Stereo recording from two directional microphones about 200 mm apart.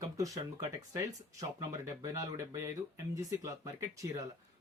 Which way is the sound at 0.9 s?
15° right (ahead or behind).